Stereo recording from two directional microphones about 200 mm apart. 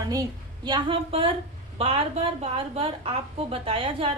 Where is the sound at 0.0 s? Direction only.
20° right (ahead or behind).